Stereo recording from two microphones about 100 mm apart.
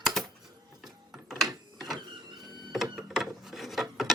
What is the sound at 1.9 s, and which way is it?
Power windows, 50° right (ahead or behind).